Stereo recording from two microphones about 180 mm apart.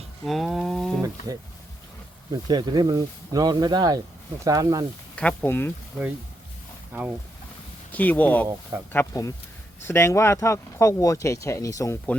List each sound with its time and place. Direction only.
0.3 s a sound: centre (ahead or behind)
1.3 s speech: 20° right (ahead or behind)
5.1 s speech: 10° left (ahead or behind)
7.9 s speech: 10° left (ahead or behind)